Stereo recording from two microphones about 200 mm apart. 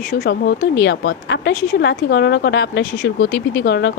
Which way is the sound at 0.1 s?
55° left (ahead or behind).